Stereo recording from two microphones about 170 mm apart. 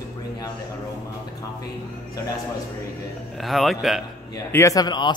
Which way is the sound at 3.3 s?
Centre (ahead or behind).